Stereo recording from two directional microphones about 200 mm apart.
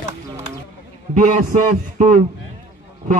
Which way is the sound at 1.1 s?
40° right (ahead or behind).